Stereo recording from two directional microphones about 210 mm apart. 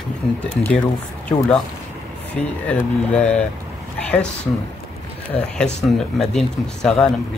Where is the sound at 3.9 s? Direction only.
5° left (ahead or behind).